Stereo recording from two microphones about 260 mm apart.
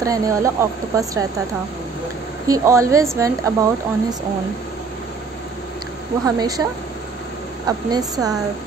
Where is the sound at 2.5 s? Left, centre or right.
Centre.